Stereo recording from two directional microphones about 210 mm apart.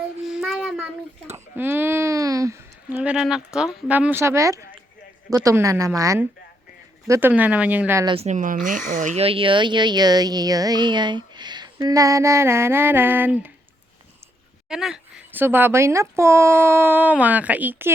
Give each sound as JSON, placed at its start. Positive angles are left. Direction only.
{"t": 0.3, "sound": "child singing", "side_deg": 0}
{"t": 1.5, "sound": "speech", "side_deg": -10}
{"t": 8.1, "sound": "speech", "side_deg": -30}
{"t": 14.7, "sound": "speech", "side_deg": -5}